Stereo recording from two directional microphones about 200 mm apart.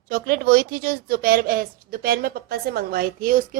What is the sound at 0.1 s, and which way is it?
A woman's voice, 50° right (ahead or behind).